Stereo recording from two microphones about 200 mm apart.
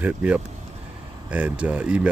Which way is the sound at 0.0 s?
5° right (ahead or behind).